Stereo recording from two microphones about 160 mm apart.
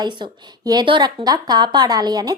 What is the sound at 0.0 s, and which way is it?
A woman's voice, 25° right (ahead or behind).